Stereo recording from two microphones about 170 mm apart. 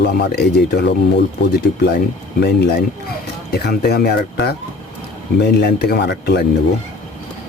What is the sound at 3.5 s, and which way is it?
Speech, 70° left (ahead or behind).